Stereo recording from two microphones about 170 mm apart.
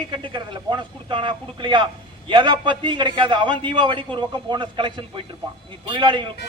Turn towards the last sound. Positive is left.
turn(degrees=-30)  # may be behind; listen again after turning